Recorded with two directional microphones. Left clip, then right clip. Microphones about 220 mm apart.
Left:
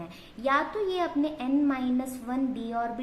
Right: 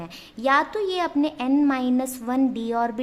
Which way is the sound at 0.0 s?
40° right (ahead or behind).